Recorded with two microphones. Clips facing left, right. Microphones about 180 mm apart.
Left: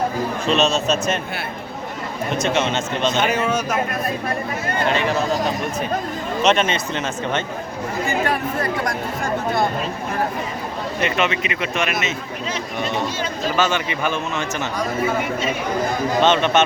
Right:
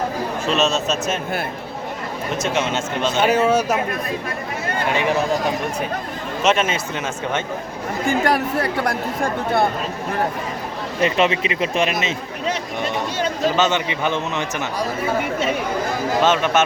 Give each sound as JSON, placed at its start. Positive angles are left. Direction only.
{"t": 0.4, "sound": "speech", "side_deg": 0}
{"t": 2.4, "sound": "speech", "side_deg": -10}
{"t": 3.4, "sound": "speech", "side_deg": -30}
{"t": 4.9, "sound": "speech", "side_deg": -15}
{"t": 6.4, "sound": "speech", "side_deg": -5}
{"t": 11.0, "sound": "speech", "side_deg": -30}
{"t": 13.6, "sound": "a man's voice", "side_deg": -20}
{"t": 16.2, "sound": "speech", "side_deg": -5}